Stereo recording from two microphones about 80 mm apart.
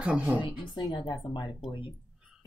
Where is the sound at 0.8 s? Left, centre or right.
Left.